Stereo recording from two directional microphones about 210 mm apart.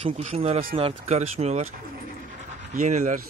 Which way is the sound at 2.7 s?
35° right (ahead or behind).